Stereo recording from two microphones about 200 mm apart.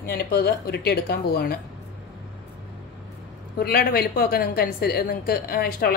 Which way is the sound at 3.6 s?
50° left (ahead or behind).